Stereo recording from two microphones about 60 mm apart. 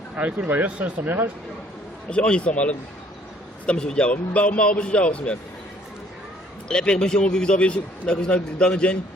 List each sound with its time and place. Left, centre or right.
0.2 s speech: right
2.0 s a man's voice: centre
6.7 s a man's voice: centre